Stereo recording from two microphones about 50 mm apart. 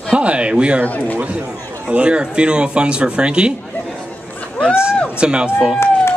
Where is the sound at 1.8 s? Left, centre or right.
Right.